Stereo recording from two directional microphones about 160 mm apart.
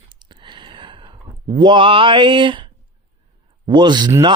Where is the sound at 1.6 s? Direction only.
30° right (ahead or behind).